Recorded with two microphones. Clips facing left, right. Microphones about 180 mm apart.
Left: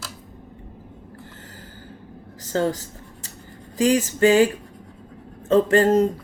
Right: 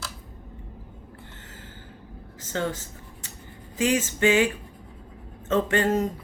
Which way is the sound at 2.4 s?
35° left (ahead or behind).